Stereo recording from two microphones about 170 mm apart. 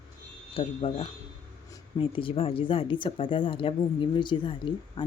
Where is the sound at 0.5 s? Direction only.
35° left (ahead or behind).